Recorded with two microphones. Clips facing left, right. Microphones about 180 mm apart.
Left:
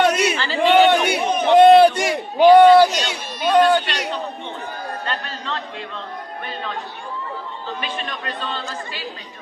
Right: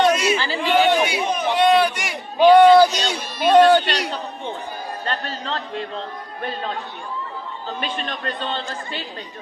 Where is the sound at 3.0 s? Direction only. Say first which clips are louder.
Right 2 dB; 35° right (ahead or behind).